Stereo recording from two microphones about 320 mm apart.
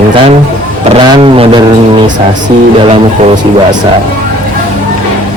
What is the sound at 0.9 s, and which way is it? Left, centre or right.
Speech, centre.